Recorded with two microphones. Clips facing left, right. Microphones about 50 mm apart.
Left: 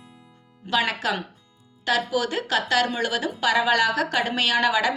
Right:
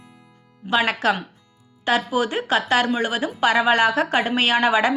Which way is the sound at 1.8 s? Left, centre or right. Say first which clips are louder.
Right 3 dB; right.